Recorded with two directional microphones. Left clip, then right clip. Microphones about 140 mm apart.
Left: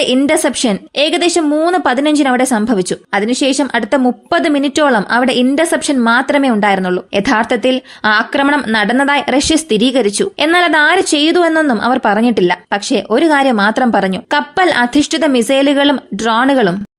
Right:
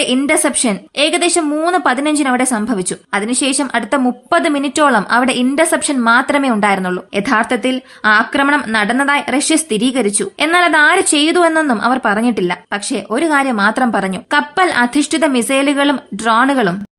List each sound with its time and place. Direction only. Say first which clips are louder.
0.3 s a woman's voice: left 2 dB; 35° left (ahead or behind)